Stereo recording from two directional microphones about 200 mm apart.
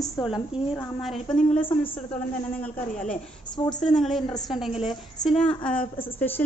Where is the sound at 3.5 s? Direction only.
20° left (ahead or behind).